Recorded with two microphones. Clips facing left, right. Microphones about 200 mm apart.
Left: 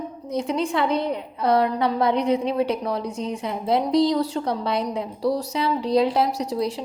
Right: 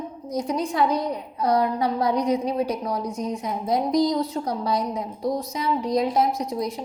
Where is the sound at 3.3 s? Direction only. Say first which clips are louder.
Left 3 dB; 65° left (ahead or behind).